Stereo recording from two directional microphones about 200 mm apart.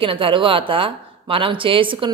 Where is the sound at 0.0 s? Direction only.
25° right (ahead or behind).